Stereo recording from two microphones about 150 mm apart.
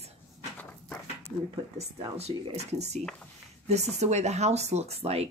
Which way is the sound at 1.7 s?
45° right (ahead or behind).